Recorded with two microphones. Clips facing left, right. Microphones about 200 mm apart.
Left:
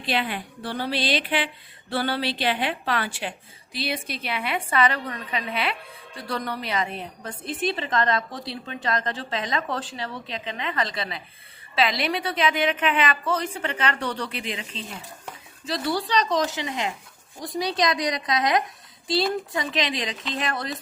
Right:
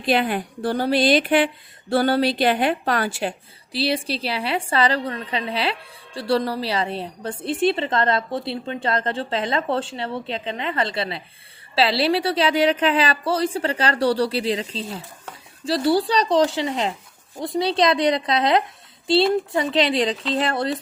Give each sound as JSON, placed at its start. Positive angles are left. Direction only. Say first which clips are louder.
{"t": 0.0, "sound": "a woman's voice", "louder": "right 7 dB", "side_deg": -45}